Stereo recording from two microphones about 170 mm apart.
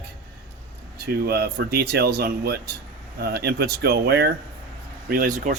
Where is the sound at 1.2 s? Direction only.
65° right (ahead or behind).